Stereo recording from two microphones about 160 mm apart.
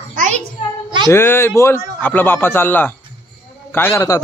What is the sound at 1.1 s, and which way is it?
A man's voice, 15° left (ahead or behind).